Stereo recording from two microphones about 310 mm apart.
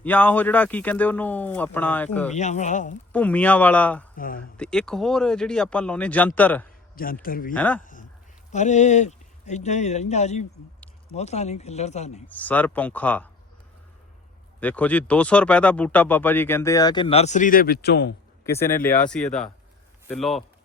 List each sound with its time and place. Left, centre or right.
0.0 s speech: centre
2.3 s speech: left
3.1 s speech: centre
4.2 s speech: left
4.5 s speech: centre
6.9 s speech: left
7.5 s speech: centre
7.8 s a sound: left
8.5 s speech: left
12.3 s speech: centre
14.6 s speech: centre; by 18.1 s left
18.4 s speech: centre